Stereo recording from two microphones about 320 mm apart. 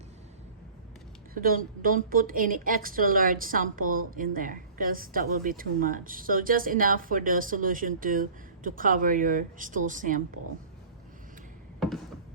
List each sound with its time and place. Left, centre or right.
1.3 s a woman's voice: right